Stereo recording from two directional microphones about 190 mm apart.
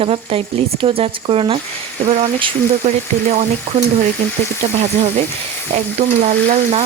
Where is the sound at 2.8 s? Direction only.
40° right (ahead or behind).